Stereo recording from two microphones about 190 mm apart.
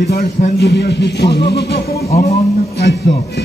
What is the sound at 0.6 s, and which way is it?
Music, 60° left (ahead or behind).